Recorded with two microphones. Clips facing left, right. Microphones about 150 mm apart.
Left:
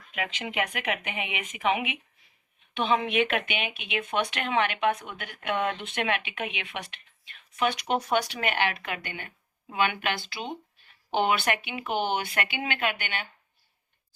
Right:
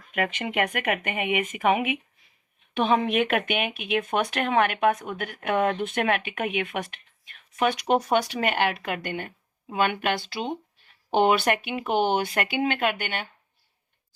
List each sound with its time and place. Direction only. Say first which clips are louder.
0.1 s speech: right 6 dB; 50° right (ahead or behind)